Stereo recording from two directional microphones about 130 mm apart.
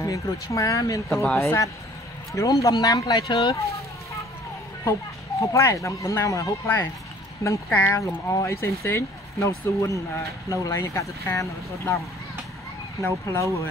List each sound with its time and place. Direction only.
0.0 s speech: 25° left (ahead or behind)
1.0 s speech: centre (ahead or behind)
1.4 s speech: 20° left (ahead or behind)
3.5 s a sound: 25° left (ahead or behind)
5.4 s speech: 25° left (ahead or behind)
13.0 s speech: 20° left (ahead or behind)